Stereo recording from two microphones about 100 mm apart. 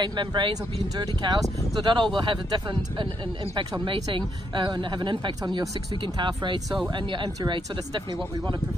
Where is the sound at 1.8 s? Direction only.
50° right (ahead or behind).